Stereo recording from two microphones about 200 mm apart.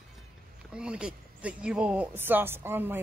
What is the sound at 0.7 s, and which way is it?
Speech, 5° right (ahead or behind).